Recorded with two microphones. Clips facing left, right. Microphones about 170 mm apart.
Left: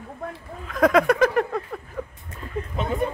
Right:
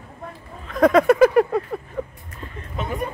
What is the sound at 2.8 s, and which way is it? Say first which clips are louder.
Vehicle: left 2 dB; 25° left (ahead or behind).